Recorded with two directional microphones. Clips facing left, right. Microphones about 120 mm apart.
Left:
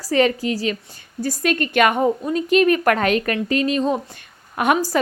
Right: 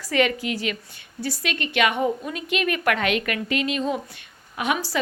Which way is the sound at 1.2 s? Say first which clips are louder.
Left 7 dB; 45° left (ahead or behind).